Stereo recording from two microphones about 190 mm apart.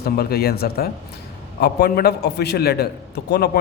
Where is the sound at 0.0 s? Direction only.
55° left (ahead or behind).